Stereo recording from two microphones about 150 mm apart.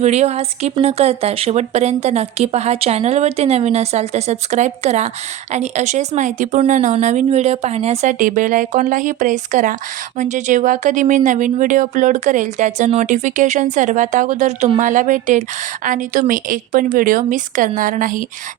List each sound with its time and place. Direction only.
0.0 s speech: 50° right (ahead or behind)
8.2 s a woman's voice: 60° right (ahead or behind)